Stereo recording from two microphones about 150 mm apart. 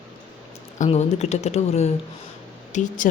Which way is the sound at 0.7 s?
50° left (ahead or behind).